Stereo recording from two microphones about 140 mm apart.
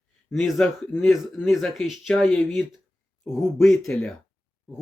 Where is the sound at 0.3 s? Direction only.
Centre (ahead or behind).